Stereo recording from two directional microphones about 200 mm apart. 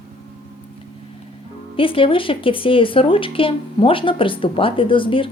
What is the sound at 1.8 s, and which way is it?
Speech, 25° left (ahead or behind).